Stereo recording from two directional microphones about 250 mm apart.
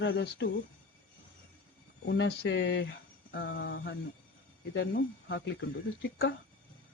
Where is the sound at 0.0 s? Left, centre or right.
Left.